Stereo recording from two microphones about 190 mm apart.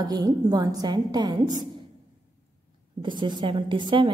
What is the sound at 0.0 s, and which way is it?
A woman's voice, 20° right (ahead or behind).